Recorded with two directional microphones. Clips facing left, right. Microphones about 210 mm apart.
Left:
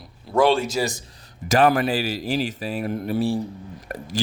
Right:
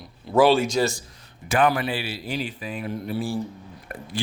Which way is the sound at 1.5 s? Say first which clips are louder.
Left 3 dB; 45° left (ahead or behind).